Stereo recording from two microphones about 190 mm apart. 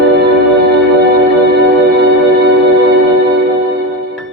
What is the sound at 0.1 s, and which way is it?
Music, 70° right (ahead or behind).